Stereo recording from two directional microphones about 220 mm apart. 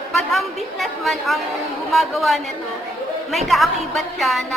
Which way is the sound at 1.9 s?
Centre (ahead or behind).